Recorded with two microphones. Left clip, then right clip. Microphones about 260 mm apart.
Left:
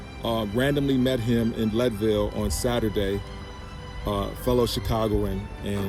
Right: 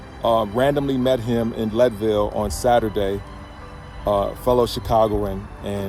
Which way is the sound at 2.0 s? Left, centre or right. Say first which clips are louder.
Right 5 dB; right.